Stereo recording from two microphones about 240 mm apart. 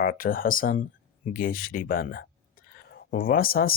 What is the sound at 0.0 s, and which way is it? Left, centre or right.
Speech, left.